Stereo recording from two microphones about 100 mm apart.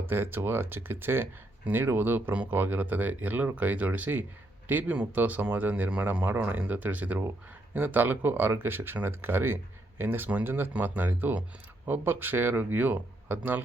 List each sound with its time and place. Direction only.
0.1 s speech: 20° right (ahead or behind)